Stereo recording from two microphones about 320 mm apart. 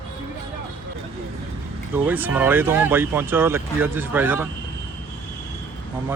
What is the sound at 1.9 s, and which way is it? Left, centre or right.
Speech, centre.